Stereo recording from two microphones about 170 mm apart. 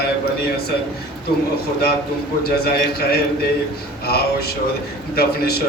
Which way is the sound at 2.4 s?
65° left (ahead or behind).